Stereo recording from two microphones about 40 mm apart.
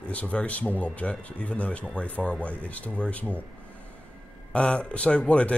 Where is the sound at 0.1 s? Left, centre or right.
Left.